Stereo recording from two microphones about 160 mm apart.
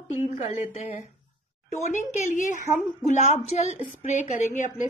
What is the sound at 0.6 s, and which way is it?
A woman's voice, 50° left (ahead or behind).